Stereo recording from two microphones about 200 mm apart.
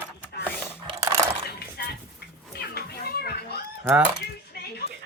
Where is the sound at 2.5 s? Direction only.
55° left (ahead or behind).